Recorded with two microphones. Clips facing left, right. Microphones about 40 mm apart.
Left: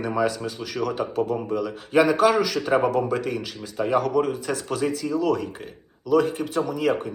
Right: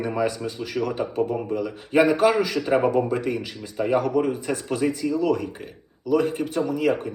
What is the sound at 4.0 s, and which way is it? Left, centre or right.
A man's voice, centre.